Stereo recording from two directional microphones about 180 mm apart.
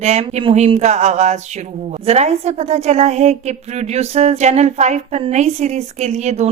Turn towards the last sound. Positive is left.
turn(degrees=-40)  # may be behind; listen again after turning